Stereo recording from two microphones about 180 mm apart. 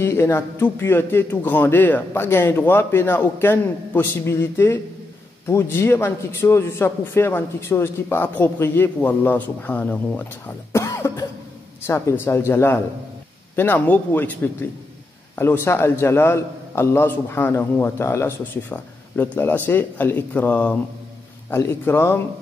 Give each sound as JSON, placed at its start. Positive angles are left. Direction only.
{"t": 0.0, "sound": "a man's voice", "side_deg": 15}